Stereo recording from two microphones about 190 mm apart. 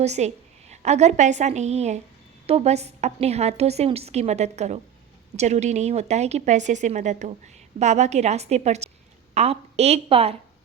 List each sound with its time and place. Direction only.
0.0 s a woman's voice: 35° right (ahead or behind)